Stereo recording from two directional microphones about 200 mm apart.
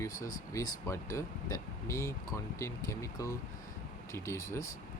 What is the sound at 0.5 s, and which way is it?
Speech, 15° left (ahead or behind).